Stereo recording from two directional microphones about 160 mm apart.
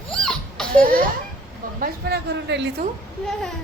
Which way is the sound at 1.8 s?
80° right.